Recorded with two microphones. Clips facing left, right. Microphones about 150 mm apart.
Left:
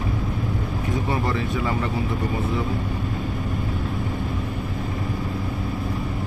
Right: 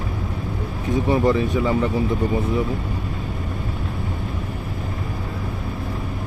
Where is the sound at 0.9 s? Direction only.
20° right (ahead or behind).